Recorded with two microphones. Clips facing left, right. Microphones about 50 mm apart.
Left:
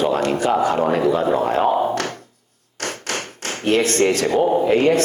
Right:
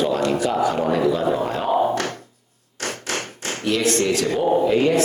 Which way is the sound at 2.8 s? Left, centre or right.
Left.